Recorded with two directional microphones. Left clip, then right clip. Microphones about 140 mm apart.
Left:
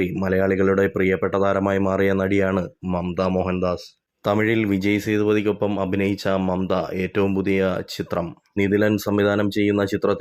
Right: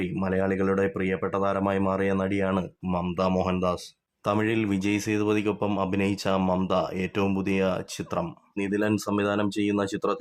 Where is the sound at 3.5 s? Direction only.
15° left (ahead or behind).